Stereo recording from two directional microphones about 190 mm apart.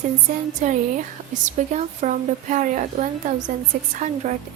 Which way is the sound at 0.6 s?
40° right (ahead or behind).